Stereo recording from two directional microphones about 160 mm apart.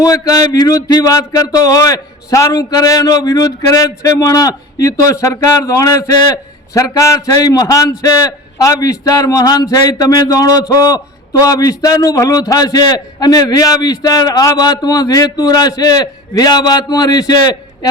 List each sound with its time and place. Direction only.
0.0 s a man's voice: 20° left (ahead or behind)